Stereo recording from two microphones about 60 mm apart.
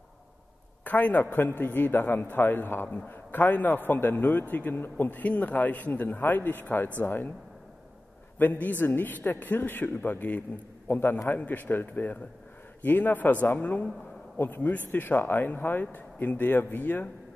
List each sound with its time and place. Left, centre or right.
0.8 s a man's voice: left
8.4 s a man's voice: left